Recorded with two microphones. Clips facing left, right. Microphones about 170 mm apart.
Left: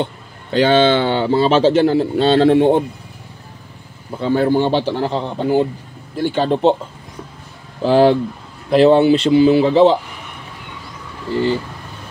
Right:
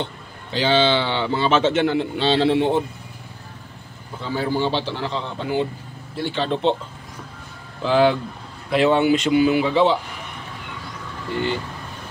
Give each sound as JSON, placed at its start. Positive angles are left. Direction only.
{"t": 0.0, "sound": "speech", "side_deg": 50}
{"t": 4.2, "sound": "speech", "side_deg": 60}
{"t": 7.8, "sound": "speech", "side_deg": 35}